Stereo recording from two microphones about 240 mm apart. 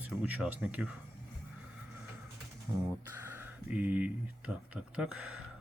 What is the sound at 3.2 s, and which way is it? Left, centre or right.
Speech, centre.